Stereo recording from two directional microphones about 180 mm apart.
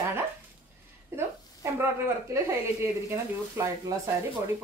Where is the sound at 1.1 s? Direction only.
15° right (ahead or behind).